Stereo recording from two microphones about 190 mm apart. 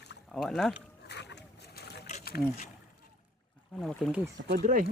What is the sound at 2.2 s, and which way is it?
Speech, 55° left (ahead or behind).